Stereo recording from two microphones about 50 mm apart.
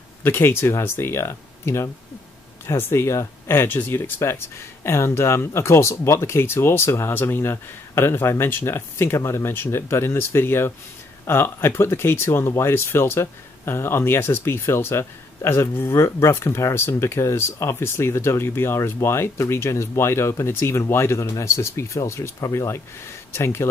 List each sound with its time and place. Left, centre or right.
0.2 s speech: left
3.5 s speech: left